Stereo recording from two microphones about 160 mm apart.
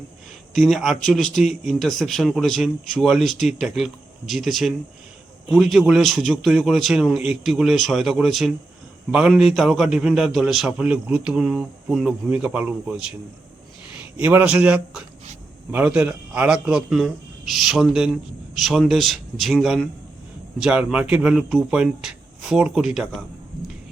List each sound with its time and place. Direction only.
0.5 s speech: centre (ahead or behind)
14.2 s speech: 10° right (ahead or behind)